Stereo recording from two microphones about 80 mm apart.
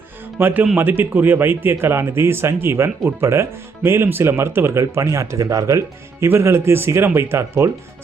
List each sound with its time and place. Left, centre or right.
0.3 s speech: right